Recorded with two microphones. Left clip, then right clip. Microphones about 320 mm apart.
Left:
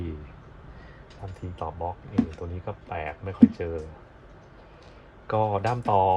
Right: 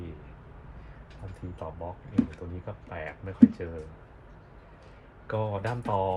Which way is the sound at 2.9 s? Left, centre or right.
Left.